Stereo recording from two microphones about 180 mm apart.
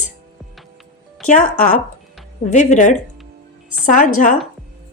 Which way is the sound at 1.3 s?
45° left (ahead or behind).